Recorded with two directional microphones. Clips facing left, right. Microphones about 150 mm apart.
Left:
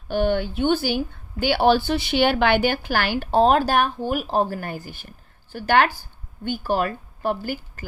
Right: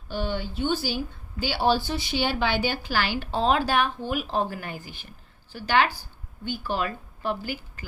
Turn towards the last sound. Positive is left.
turn(degrees=45)  # may be behind; listen again after turning